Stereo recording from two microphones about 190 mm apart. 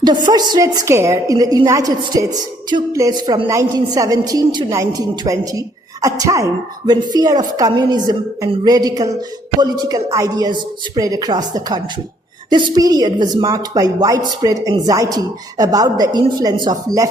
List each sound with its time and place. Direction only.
0.0 s a woman's voice: 20° right (ahead or behind)